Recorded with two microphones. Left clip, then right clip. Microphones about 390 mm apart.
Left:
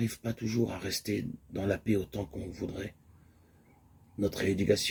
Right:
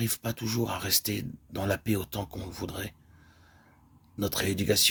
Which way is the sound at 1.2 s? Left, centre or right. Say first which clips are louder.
Right 2 dB; right.